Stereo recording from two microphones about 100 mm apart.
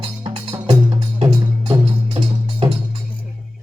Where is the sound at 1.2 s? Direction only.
70° right (ahead or behind).